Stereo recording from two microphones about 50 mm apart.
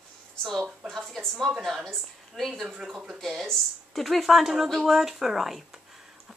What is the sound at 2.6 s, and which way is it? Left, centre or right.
Speech, centre.